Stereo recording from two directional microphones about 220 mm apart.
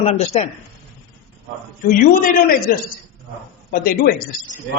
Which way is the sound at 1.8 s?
40° left (ahead or behind).